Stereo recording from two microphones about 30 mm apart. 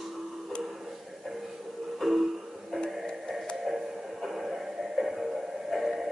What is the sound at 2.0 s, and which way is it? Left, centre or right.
Music, centre.